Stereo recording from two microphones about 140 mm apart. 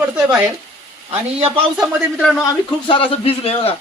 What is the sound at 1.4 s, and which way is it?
Speech, 45° right (ahead or behind).